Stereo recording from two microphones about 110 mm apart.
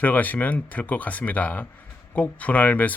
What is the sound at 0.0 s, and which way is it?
Speech, 15° left (ahead or behind).